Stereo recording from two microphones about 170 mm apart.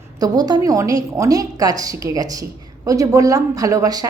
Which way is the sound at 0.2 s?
25° right (ahead or behind).